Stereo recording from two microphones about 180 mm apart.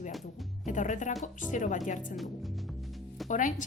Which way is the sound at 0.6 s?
45° left (ahead or behind).